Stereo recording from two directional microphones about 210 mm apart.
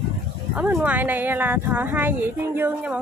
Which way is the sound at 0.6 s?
10° right (ahead or behind).